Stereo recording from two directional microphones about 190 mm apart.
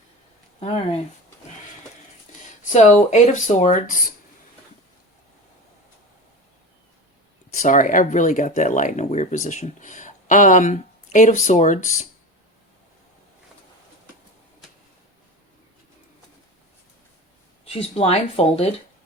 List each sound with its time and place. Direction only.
2.6 s speech: 40° left (ahead or behind)
7.5 s speech: 40° left (ahead or behind)
17.7 s speech: 30° left (ahead or behind)